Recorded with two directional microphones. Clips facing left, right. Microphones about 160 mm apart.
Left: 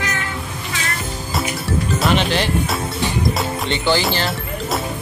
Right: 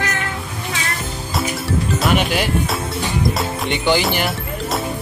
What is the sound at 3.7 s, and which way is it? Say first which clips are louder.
Music: right 1 dB; 15° right (ahead or behind).